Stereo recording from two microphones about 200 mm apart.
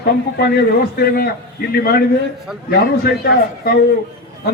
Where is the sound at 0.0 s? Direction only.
50° left (ahead or behind).